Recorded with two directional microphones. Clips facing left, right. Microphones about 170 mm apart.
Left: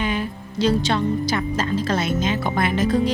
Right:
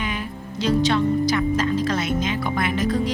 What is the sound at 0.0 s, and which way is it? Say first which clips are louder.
Speech: left 4 dB; 30° left (ahead or behind).